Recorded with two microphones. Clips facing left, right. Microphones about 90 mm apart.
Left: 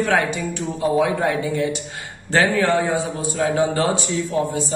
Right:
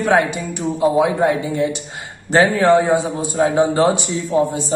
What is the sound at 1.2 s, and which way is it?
Speech, 30° right (ahead or behind).